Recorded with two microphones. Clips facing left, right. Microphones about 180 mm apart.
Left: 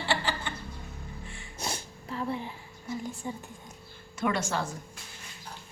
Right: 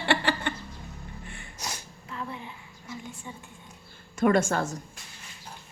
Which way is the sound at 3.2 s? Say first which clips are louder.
Left 6 dB; 40° left (ahead or behind).